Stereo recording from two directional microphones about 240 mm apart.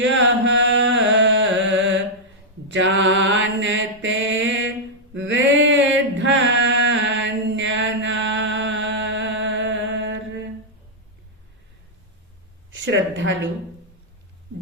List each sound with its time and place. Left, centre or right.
0.0 s chant: right
2.6 s mantra: right
12.7 s a sound: right